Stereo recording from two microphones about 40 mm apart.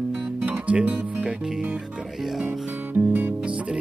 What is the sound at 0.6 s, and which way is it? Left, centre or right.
Music, right.